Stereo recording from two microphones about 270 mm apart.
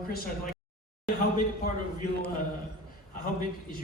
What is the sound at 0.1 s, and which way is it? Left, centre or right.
Speech, left.